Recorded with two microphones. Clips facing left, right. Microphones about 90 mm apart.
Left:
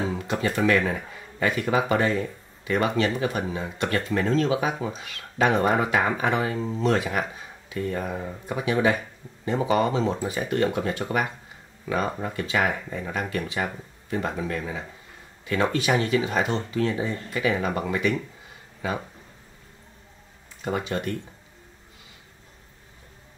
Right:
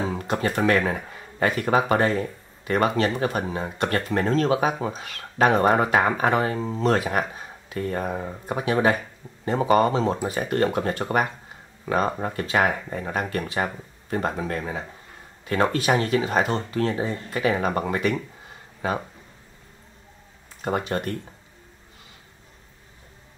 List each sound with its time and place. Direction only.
0.1 s a sound: 45° right (ahead or behind)
0.6 s speech: 40° right (ahead or behind)
20.6 s speech: 45° right (ahead or behind)